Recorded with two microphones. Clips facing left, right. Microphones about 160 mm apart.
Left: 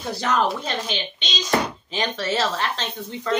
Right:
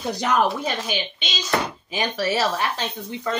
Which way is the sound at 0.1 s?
15° right (ahead or behind).